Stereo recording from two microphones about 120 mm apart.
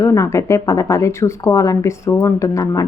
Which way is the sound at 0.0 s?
25° left (ahead or behind).